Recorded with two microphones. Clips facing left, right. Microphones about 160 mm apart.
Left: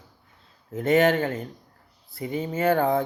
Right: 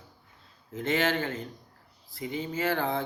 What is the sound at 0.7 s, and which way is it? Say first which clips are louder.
Speech: left 8 dB; 40° left (ahead or behind).